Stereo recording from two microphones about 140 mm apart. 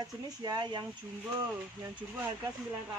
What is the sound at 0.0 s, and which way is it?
Speech, 30° right (ahead or behind).